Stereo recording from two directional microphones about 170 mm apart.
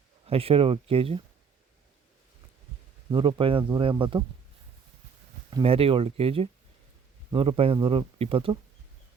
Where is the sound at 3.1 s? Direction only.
30° right (ahead or behind).